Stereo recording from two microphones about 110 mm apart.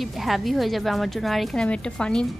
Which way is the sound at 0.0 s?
Centre (ahead or behind).